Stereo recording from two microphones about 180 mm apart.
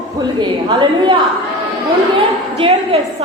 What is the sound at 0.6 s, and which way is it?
Speech, 25° right (ahead or behind).